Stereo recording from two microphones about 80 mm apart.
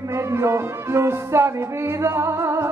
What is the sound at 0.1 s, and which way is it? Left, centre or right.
Music, right.